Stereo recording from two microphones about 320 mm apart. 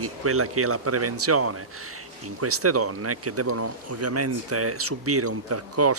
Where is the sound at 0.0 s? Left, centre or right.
Right.